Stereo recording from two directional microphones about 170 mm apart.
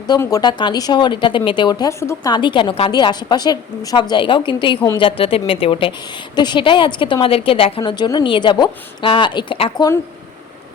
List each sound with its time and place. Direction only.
0.2 s speech: 20° left (ahead or behind)